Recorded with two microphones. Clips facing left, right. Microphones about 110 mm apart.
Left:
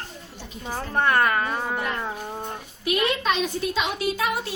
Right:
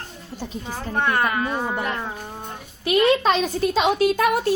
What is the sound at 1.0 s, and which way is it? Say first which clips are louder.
Speech: left 1 dB; 15° right (ahead or behind).